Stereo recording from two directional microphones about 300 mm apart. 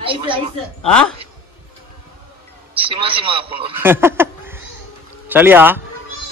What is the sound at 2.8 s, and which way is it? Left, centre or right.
Speech, centre.